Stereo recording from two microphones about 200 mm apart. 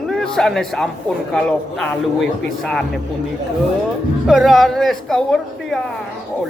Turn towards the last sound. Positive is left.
turn(degrees=0)  # may be behind; listen again after turning